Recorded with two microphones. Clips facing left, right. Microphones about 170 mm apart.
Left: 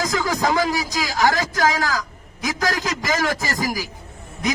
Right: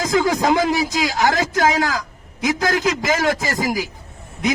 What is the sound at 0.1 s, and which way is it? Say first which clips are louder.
A man's voice: right 4 dB; 25° right (ahead or behind).